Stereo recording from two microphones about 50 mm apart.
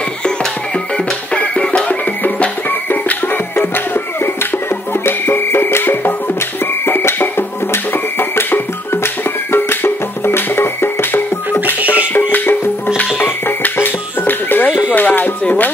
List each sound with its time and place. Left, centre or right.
0.9 s music: centre
1.9 s music: left
3.5 s music: left
11.8 s music: right
12.1 s music: left
14.9 s a sound: left